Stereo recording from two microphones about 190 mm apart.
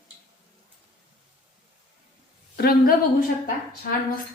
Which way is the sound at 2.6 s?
50° left (ahead or behind).